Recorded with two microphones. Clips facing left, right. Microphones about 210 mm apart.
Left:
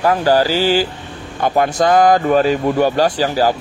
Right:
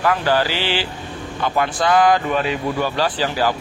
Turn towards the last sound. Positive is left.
turn(degrees=40)  # may be behind; listen again after turning